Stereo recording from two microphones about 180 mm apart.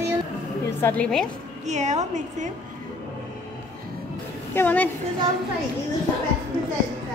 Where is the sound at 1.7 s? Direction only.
40° right (ahead or behind).